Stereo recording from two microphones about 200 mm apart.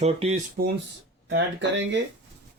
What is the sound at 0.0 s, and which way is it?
Speech, 30° right (ahead or behind).